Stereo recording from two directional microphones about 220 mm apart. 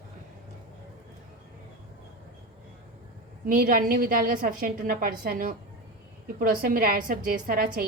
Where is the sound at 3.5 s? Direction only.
40° right (ahead or behind).